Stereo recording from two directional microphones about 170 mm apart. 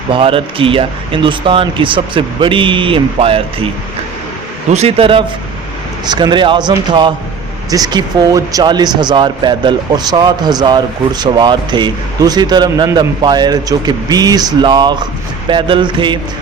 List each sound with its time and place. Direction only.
0.1 s speech: 30° right (ahead or behind)
4.7 s speech: 40° right (ahead or behind)